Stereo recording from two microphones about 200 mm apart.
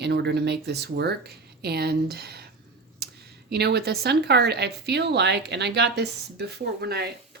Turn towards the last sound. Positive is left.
turn(degrees=-55)  # may be behind; listen again after turning